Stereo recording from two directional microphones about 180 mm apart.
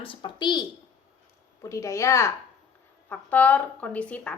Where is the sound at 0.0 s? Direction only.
30° left (ahead or behind).